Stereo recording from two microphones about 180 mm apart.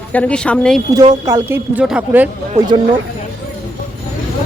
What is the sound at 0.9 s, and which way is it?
Speech, 20° right (ahead or behind).